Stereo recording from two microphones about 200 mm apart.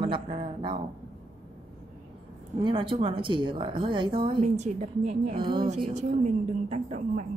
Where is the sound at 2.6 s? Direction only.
25° right (ahead or behind).